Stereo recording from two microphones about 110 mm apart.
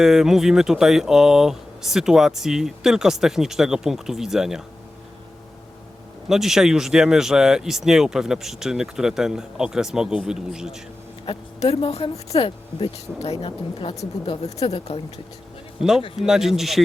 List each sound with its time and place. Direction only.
0.0 s speech: 5° right (ahead or behind)
6.2 s speech: 5° right (ahead or behind)
11.3 s speech: 60° left (ahead or behind)
14.4 s speech: 75° left (ahead or behind)
16.2 s speech: 5° right (ahead or behind)